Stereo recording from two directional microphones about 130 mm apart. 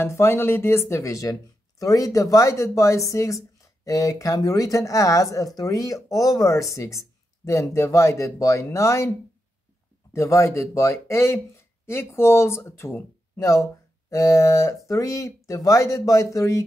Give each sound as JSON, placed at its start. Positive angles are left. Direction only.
{"t": 0.0, "sound": "speech", "side_deg": 20}
{"t": 10.1, "sound": "speech", "side_deg": 25}